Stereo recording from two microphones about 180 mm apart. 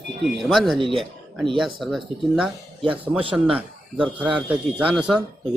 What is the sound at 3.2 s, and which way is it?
Speech, 30° right (ahead or behind).